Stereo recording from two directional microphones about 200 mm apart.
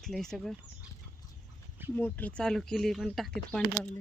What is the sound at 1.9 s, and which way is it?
Speech, 5° left (ahead or behind).